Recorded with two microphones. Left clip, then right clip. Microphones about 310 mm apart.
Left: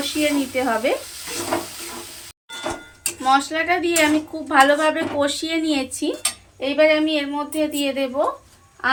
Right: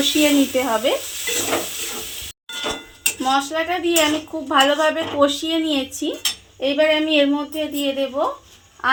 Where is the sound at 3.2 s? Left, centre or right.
Right.